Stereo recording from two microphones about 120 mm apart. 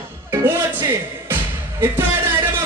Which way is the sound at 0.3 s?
20° right (ahead or behind).